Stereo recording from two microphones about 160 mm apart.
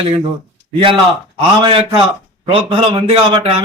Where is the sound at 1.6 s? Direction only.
35° right (ahead or behind).